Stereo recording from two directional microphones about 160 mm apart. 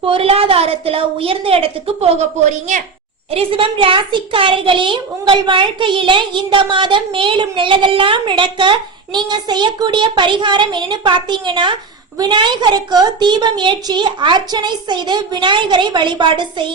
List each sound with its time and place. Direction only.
0.0 s a woman's voice: 35° right (ahead or behind)
3.3 s a woman's voice: 35° right (ahead or behind)